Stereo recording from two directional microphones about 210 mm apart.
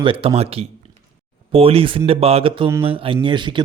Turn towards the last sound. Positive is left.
turn(degrees=-20)  # may be behind; listen again after turning